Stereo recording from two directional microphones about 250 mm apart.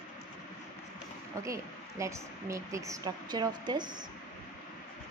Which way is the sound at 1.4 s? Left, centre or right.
Centre.